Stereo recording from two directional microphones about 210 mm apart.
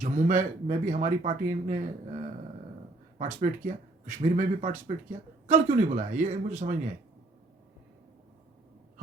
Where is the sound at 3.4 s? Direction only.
35° right (ahead or behind).